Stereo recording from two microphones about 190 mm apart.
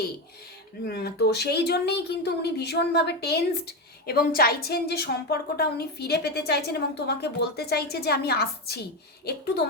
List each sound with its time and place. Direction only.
0.9 s a woman's voice: 55° left (ahead or behind)